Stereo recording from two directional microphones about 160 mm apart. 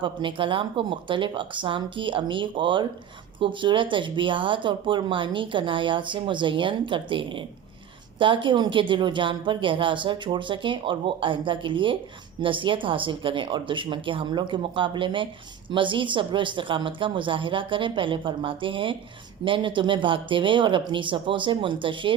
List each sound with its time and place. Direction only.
0.0 s speech: 30° right (ahead or behind)